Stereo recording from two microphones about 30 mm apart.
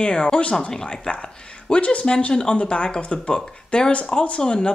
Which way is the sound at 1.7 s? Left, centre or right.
Left.